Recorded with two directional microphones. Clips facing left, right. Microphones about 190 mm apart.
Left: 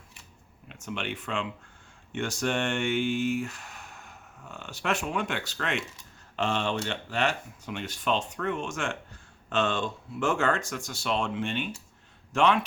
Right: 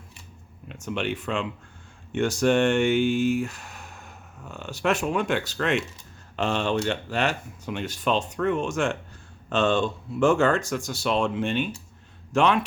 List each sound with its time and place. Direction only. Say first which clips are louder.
0.9 s a man's voice: right 5 dB; 40° right (ahead or behind)